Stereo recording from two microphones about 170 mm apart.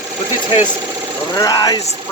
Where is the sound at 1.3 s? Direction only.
20° left (ahead or behind).